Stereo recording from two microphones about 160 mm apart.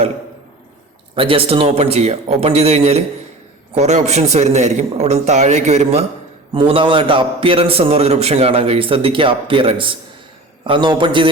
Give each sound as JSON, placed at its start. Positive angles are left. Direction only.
{"t": 1.1, "sound": "a man's voice", "side_deg": -35}